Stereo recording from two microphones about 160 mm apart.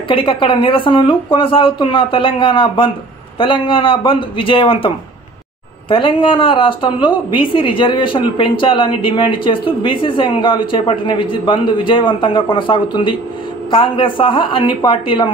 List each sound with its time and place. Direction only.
0.1 s a woman's voice: 30° left (ahead or behind)